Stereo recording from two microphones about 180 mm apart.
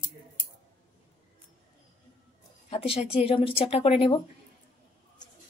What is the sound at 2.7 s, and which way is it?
Speech, 35° left (ahead or behind).